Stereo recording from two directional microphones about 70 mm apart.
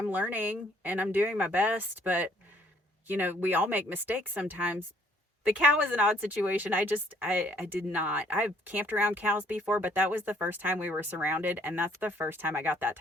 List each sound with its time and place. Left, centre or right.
0.1 s speech: right